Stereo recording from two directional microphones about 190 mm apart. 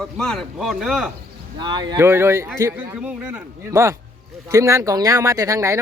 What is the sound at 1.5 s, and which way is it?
Speech, 25° right (ahead or behind).